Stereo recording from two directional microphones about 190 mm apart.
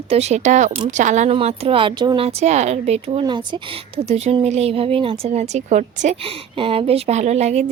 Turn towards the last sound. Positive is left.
turn(degrees=-35)  # may be behind; listen again after turning